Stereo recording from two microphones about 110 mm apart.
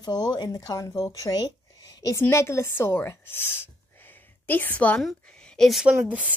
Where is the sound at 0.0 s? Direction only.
40° left (ahead or behind).